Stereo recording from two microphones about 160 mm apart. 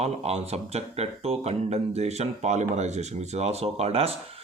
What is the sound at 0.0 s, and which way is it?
Speech, 40° right (ahead or behind).